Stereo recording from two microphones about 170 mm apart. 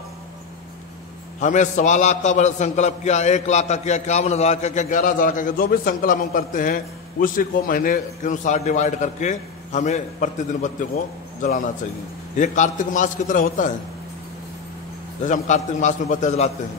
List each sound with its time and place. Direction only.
1.4 s a man's voice: 45° left (ahead or behind)
15.2 s a man's voice: 45° left (ahead or behind)